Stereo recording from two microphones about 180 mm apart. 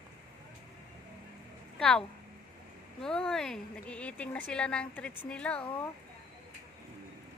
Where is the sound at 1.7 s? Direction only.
5° left (ahead or behind).